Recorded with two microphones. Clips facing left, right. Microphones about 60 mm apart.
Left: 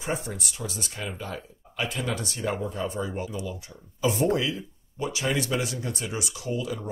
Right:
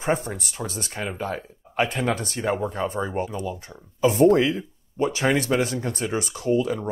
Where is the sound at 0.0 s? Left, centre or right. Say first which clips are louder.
Right 6 dB; right.